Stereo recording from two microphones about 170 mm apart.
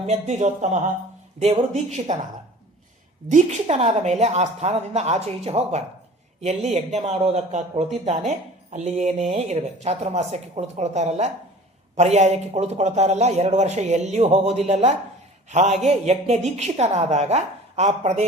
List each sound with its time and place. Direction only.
0.0 s speech: 40° right (ahead or behind)
3.2 s speech: 40° right (ahead or behind)